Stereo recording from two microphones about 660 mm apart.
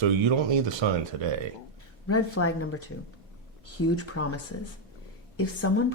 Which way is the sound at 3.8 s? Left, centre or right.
Centre.